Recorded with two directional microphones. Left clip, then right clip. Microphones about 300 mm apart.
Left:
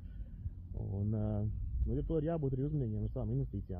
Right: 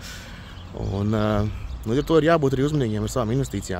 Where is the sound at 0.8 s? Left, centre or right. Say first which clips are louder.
Right 17 dB; right.